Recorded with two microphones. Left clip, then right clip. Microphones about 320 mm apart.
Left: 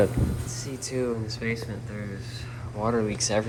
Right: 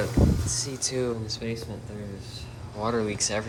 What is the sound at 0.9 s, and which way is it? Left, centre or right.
Speech, centre.